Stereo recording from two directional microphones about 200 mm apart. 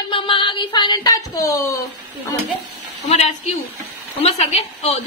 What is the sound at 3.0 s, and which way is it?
A woman's voice, 35° left (ahead or behind).